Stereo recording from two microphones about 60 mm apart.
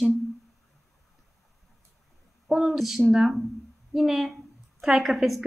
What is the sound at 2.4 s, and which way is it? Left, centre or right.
A woman's voice, centre.